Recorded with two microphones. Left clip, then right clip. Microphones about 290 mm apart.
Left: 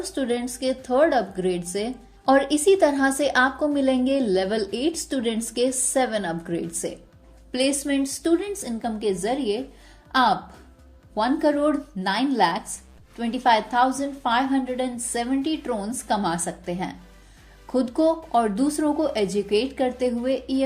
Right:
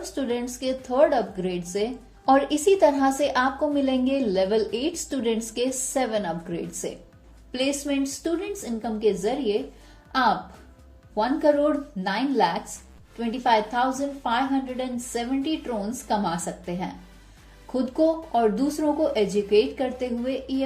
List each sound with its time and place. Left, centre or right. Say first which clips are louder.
0.0 s speech: left 2 dB; left
11.3 s speech: right 3 dB; left